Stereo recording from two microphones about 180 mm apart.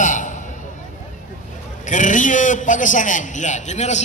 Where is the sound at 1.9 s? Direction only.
45° left (ahead or behind).